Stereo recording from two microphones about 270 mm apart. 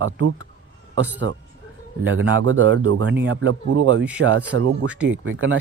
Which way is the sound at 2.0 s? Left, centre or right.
Right.